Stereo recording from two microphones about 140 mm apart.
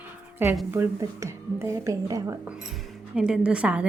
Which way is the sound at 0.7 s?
20° right (ahead or behind).